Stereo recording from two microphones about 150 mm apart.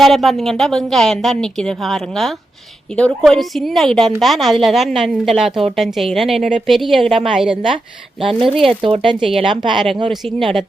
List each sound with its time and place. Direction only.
0.0 s a woman's voice: centre (ahead or behind)
8.2 s speech: 35° right (ahead or behind)
8.4 s a woman's voice: centre (ahead or behind)
8.8 s speech: 40° right (ahead or behind)
10.1 s a woman's voice: centre (ahead or behind)